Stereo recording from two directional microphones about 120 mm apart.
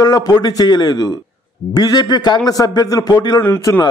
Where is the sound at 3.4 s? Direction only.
25° left (ahead or behind).